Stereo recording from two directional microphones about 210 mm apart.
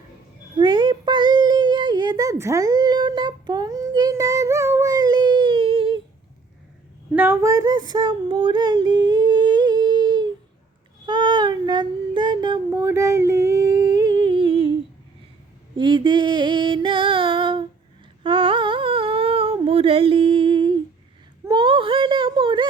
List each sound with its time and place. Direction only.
0.6 s child singing: 20° right (ahead or behind)
7.1 s female singing: 10° right (ahead or behind)
11.0 s child singing: 20° right (ahead or behind)
15.7 s a sound: 25° right (ahead or behind)
18.2 s humming: 25° right (ahead or behind)
21.4 s a sound: 20° right (ahead or behind)